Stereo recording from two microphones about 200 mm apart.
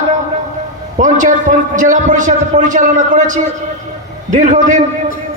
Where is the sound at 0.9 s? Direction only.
40° right (ahead or behind).